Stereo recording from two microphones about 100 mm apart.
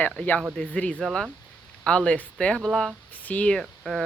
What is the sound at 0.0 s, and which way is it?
Speech, 15° left (ahead or behind).